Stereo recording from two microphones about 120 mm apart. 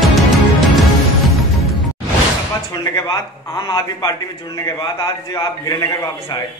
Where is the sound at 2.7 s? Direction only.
35° left (ahead or behind).